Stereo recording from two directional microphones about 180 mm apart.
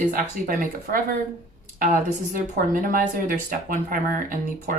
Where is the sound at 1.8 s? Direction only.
50° right (ahead or behind).